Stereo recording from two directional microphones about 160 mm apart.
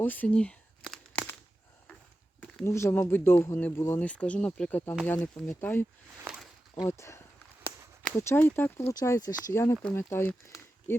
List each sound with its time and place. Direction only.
0.0 s crumpling: 10° left (ahead or behind)
2.6 s speech: 15° left (ahead or behind)
6.2 s a sound: centre (ahead or behind)
6.8 s speech: 20° left (ahead or behind)